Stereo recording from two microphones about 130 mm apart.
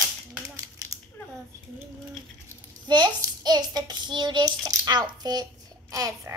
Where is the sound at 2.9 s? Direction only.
35° right (ahead or behind).